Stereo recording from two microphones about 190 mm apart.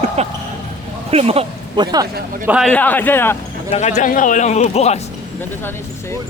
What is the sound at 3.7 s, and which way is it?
Speech, 35° left (ahead or behind).